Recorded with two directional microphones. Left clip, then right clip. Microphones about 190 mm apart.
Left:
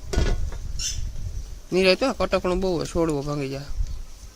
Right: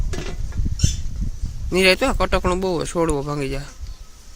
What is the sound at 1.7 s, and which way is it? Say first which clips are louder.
Speech: right 3 dB; 5° right (ahead or behind).